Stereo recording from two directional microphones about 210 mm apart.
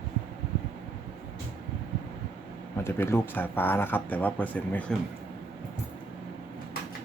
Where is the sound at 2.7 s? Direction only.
10° left (ahead or behind).